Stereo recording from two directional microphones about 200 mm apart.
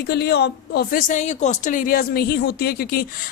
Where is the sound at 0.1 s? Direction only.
55° left (ahead or behind).